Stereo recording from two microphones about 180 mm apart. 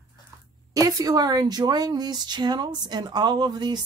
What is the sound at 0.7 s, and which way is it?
A woman's voice, 20° right (ahead or behind).